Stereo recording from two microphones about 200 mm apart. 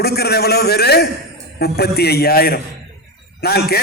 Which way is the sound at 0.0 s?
55° left (ahead or behind).